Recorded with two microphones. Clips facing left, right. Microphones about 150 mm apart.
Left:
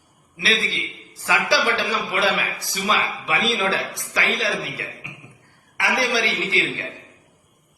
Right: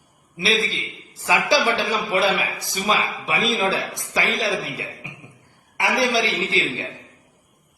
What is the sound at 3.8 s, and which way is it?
Speech, 20° right (ahead or behind).